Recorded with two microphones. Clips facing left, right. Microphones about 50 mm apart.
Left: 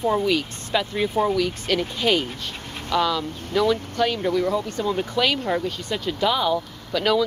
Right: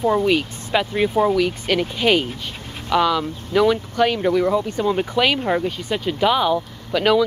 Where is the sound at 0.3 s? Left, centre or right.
Right.